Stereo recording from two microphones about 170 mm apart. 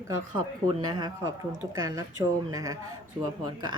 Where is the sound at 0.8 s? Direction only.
25° right (ahead or behind).